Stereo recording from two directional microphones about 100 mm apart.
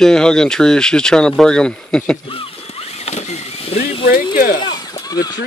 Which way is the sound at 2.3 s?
70° left (ahead or behind).